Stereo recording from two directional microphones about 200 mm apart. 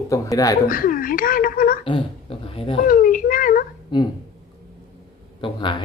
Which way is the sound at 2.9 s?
45° left (ahead or behind).